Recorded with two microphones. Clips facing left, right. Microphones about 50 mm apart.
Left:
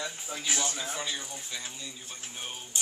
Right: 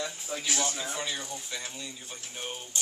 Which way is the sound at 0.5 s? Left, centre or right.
Centre.